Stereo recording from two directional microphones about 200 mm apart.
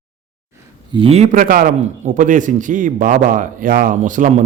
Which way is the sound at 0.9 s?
30° right (ahead or behind).